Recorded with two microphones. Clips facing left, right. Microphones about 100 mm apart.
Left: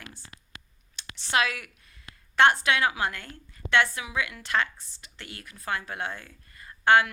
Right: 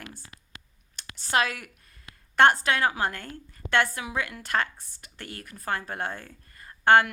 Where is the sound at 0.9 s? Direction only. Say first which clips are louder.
Right 1 dB; 40° right (ahead or behind).